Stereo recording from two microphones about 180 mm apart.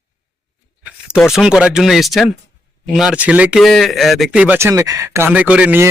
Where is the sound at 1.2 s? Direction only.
5° right (ahead or behind).